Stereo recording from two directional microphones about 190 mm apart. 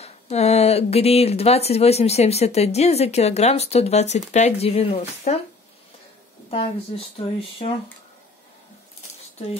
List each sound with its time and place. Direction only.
0.0 s speech: 35° left (ahead or behind)
6.5 s speech: 30° left (ahead or behind)